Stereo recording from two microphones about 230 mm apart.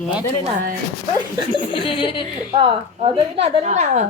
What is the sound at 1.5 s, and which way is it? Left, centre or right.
Speech, left.